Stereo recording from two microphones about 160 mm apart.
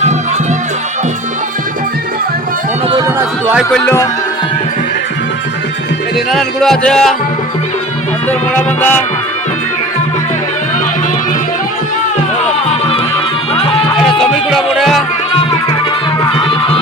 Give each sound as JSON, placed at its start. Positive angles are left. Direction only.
{"t": 3.2, "sound": "music", "side_deg": -15}
{"t": 3.8, "sound": "music", "side_deg": 20}
{"t": 6.1, "sound": "speech", "side_deg": 0}
{"t": 8.3, "sound": "music", "side_deg": 10}
{"t": 13.5, "sound": "music", "side_deg": 35}
{"t": 14.0, "sound": "music", "side_deg": 0}
{"t": 16.4, "sound": "music", "side_deg": 35}